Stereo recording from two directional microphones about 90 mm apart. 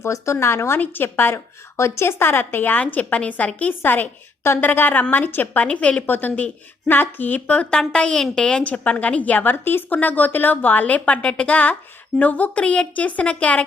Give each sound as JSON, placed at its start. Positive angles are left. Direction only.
{"t": 0.0, "sound": "a woman's voice", "side_deg": 30}